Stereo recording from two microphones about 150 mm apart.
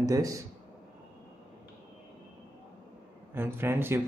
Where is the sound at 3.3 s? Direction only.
15° right (ahead or behind).